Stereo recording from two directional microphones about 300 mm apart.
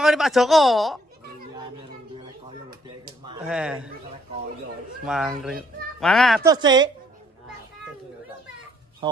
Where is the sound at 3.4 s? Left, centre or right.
Centre.